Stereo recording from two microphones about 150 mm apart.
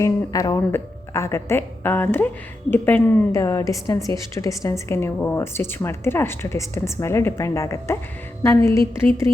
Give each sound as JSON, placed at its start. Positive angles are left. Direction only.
{"t": 0.0, "sound": "a woman's voice", "side_deg": 25}
{"t": 8.4, "sound": "music", "side_deg": 20}